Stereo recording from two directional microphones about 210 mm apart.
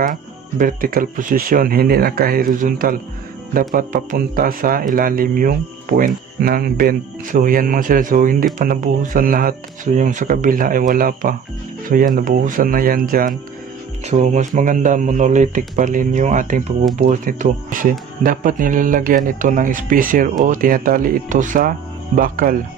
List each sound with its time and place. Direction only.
0.0 s speech: 40° right (ahead or behind)